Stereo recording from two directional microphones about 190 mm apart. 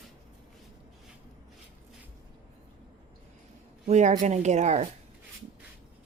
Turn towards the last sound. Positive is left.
turn(degrees=-35)  # may be behind; listen again after turning